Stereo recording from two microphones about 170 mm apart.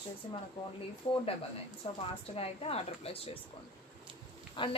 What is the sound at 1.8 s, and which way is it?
Speech, 35° left (ahead or behind).